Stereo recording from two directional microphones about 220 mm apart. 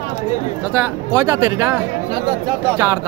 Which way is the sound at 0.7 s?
10° right (ahead or behind).